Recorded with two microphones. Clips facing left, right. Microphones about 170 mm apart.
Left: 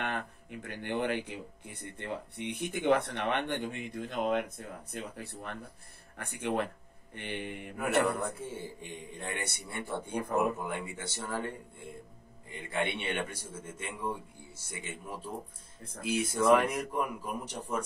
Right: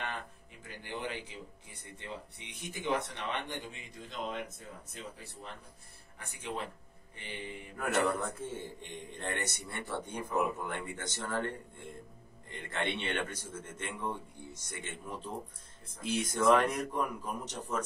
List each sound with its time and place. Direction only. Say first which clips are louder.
0.0 s speech: left 5 dB; 60° left (ahead or behind)
8.4 s a man's voice: even; 10° left (ahead or behind)